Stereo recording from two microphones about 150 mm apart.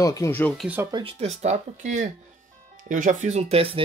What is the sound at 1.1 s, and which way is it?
Speech, 45° right (ahead or behind).